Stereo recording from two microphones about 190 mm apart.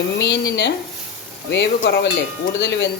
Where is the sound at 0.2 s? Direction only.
65° left (ahead or behind).